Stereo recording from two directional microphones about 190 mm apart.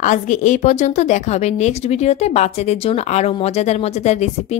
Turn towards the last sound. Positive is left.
turn(degrees=35)  # may be behind; listen again after turning